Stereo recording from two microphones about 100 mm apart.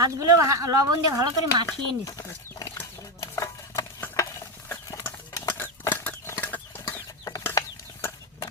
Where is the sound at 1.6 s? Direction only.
35° left (ahead or behind).